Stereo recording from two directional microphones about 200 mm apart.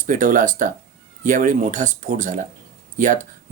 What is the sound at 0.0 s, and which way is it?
Speech, 40° right (ahead or behind).